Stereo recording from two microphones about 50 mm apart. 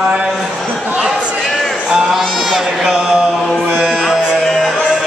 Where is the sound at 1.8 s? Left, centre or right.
Centre.